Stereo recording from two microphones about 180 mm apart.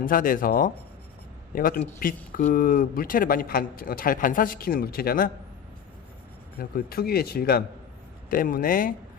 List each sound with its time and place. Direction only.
0.0 s speech: 50° left (ahead or behind)
6.6 s speech: 55° left (ahead or behind)